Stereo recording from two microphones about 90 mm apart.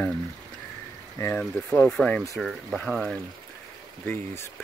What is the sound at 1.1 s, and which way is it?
Speech, 30° left (ahead or behind).